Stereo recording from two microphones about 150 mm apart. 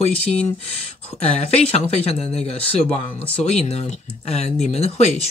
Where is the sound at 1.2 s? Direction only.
40° left (ahead or behind).